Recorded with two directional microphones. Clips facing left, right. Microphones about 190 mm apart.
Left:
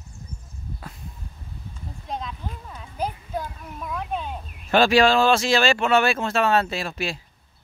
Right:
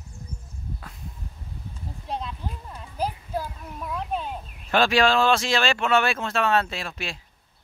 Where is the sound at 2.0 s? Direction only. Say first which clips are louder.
Even; 5° right (ahead or behind).